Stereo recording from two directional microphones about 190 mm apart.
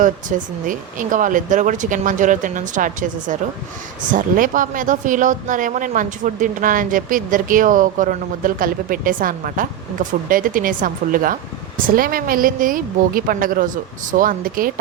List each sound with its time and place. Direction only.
0.0 s speech: 45° right (ahead or behind)